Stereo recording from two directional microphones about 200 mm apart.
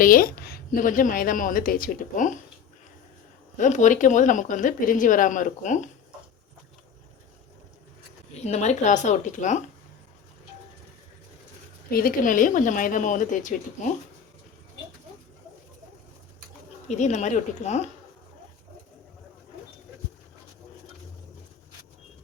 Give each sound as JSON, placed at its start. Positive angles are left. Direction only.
{"t": 0.0, "sound": "a woman's voice", "side_deg": 45}
{"t": 3.6, "sound": "speech", "side_deg": 40}
{"t": 8.3, "sound": "speech", "side_deg": 35}
{"t": 11.9, "sound": "speech", "side_deg": 45}
{"t": 16.9, "sound": "speech", "side_deg": 35}